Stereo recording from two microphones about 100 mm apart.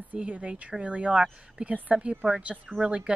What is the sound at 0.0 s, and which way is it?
A woman's voice, 15° right (ahead or behind).